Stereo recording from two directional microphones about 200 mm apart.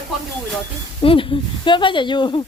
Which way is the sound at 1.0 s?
25° left (ahead or behind).